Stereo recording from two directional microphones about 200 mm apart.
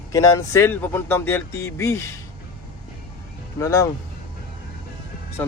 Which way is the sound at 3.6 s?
15° left (ahead or behind).